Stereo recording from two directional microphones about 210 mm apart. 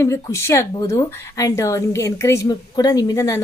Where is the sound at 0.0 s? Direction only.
15° left (ahead or behind).